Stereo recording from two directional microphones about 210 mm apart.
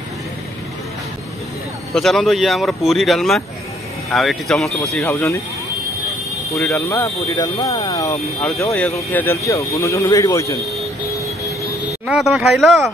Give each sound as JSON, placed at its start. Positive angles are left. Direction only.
{"t": 2.0, "sound": "speech", "side_deg": 0}
{"t": 6.5, "sound": "speech", "side_deg": 15}
{"t": 8.4, "sound": "speech", "side_deg": 0}
{"t": 12.1, "sound": "speech", "side_deg": 0}